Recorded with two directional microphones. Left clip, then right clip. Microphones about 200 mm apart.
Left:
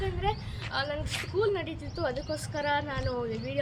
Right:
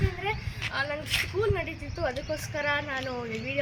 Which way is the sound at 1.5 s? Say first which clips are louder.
Right 1 dB; 15° left (ahead or behind).